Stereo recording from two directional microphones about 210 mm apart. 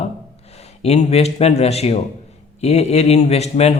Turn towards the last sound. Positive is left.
turn(degrees=30)  # may be behind; listen again after turning